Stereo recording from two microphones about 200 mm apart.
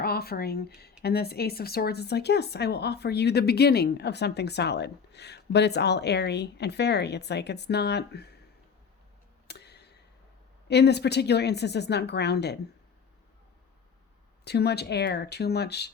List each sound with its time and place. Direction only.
0.0 s speech: 50° left (ahead or behind)
9.5 s a sound: 55° left (ahead or behind)
10.7 s speech: 55° left (ahead or behind)
14.4 s speech: 55° left (ahead or behind)